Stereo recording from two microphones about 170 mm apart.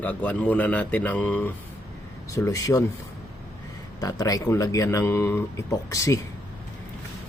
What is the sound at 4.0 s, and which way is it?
Speech, 20° left (ahead or behind).